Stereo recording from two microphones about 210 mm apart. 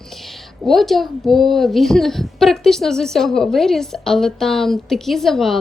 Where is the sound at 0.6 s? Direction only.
Centre (ahead or behind).